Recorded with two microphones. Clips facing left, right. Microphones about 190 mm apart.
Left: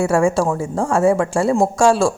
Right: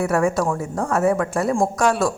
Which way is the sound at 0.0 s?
25° left (ahead or behind).